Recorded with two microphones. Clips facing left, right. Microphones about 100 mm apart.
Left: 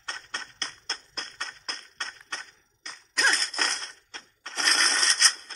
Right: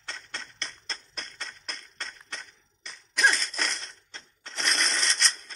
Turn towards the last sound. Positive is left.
turn(degrees=60)  # may be behind; listen again after turning